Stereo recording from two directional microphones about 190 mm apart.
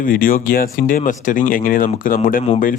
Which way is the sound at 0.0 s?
50° left (ahead or behind).